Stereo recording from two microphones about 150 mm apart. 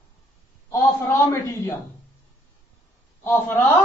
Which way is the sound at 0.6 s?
20° left (ahead or behind).